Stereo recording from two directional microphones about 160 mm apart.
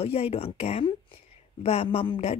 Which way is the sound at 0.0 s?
40° left (ahead or behind).